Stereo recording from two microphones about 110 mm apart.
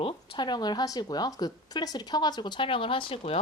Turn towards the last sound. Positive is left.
turn(degrees=55)  # may be behind; listen again after turning